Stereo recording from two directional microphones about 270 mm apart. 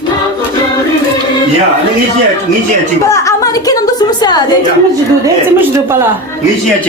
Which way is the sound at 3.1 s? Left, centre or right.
Centre.